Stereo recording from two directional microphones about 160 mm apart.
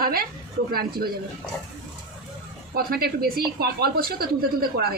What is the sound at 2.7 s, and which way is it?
A woman's voice, 70° right (ahead or behind).